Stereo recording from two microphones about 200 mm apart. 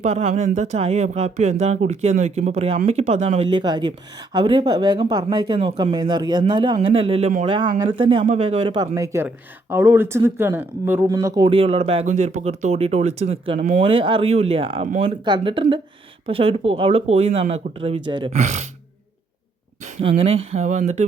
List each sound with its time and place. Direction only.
0.0 s speech: 35° right (ahead or behind)
18.3 s speech: 35° right (ahead or behind)
19.8 s speech: 25° right (ahead or behind)